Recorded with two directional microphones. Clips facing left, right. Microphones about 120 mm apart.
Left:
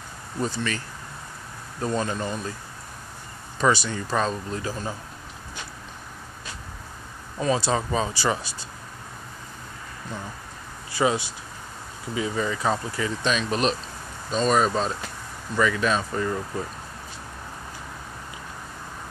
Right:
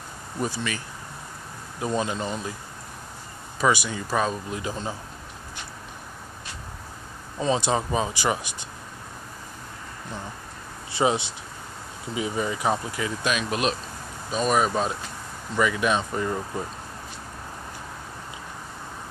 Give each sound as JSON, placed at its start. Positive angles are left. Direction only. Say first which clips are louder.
{"t": 0.4, "sound": "speech", "louder": "left 1 dB", "side_deg": -10}
{"t": 3.6, "sound": "speech", "louder": "left 1 dB", "side_deg": -10}
{"t": 7.3, "sound": "speech", "louder": "even", "side_deg": -20}
{"t": 10.9, "sound": "speech", "louder": "even", "side_deg": -25}